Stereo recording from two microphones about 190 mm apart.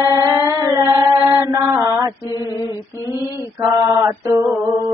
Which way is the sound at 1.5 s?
15° right (ahead or behind).